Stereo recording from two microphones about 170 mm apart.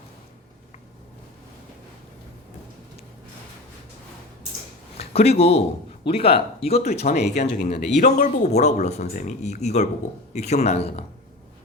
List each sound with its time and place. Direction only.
4.9 s speech: 35° left (ahead or behind)